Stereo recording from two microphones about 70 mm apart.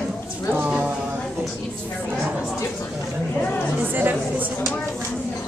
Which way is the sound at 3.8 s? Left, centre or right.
Right.